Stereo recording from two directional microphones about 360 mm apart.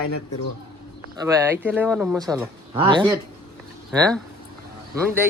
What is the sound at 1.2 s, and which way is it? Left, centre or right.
Speech, centre.